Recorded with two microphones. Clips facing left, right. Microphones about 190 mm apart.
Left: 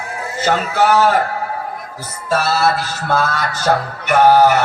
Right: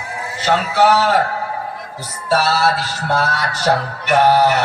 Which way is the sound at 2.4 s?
45° left (ahead or behind).